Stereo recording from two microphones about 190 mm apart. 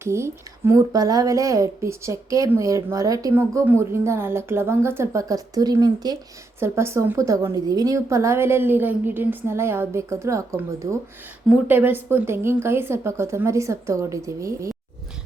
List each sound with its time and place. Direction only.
0.0 s speech: 15° right (ahead or behind)
11.4 s speech: 10° right (ahead or behind)